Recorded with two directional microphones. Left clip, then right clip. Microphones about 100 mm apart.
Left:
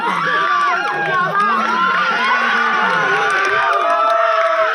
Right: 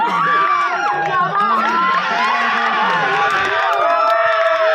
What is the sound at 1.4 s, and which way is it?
Crowd, 20° left (ahead or behind).